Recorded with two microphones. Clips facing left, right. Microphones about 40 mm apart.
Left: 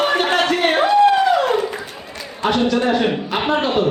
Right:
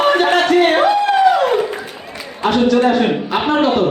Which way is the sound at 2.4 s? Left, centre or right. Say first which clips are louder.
Right 4 dB; centre.